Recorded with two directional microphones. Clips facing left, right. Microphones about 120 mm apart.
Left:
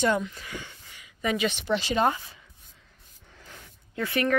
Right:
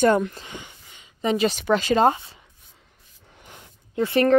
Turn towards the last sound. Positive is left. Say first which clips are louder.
# right 7 dB
turn(degrees=-25)  # may be behind; listen again after turning